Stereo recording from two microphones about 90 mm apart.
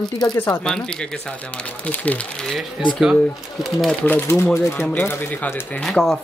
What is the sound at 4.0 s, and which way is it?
Speech, 25° left (ahead or behind).